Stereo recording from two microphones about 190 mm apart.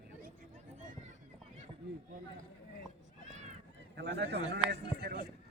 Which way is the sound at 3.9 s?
60° right (ahead or behind).